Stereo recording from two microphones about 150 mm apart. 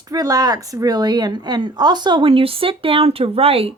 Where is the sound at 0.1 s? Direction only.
25° right (ahead or behind).